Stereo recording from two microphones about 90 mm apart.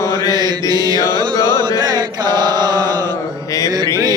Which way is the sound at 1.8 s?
50° right (ahead or behind).